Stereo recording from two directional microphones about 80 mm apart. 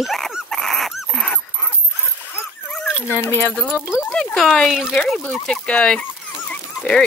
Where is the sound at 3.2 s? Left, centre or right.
Left.